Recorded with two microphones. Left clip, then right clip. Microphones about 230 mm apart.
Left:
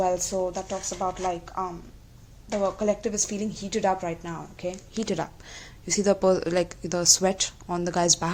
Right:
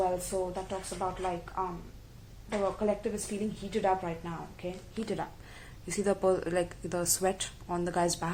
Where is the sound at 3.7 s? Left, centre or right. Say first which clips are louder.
Left 4 dB; left.